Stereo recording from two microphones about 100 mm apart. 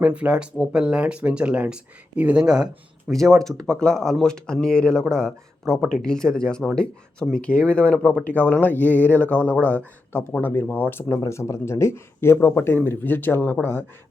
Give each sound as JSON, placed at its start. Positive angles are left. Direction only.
{"t": 0.0, "sound": "speech", "side_deg": -15}
{"t": 3.1, "sound": "speech", "side_deg": 5}